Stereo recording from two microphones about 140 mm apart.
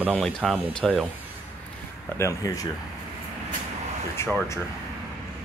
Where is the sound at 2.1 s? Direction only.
20° left (ahead or behind).